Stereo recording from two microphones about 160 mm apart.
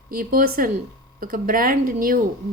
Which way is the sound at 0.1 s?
60° right (ahead or behind).